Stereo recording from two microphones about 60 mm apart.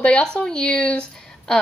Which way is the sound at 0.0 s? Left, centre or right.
Centre.